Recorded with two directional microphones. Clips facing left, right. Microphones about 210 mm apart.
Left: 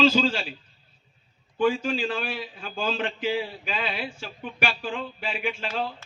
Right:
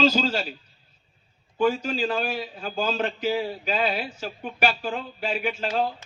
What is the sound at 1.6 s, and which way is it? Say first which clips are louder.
A man's voice: even; 40° right (ahead or behind).